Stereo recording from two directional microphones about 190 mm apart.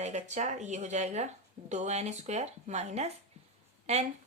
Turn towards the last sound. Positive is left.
turn(degrees=-35)  # may be behind; listen again after turning